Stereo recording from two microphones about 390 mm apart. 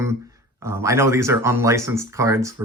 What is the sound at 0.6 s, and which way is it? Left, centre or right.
Speech, centre.